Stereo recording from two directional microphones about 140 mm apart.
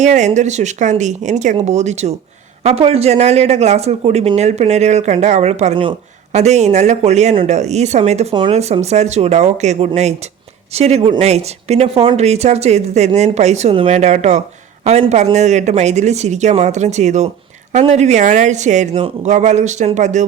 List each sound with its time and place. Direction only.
0.0 s speech: 60° right (ahead or behind)